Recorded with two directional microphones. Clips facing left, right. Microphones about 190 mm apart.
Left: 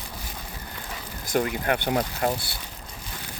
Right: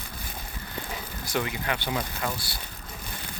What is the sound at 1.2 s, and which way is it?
Speech, 50° left (ahead or behind).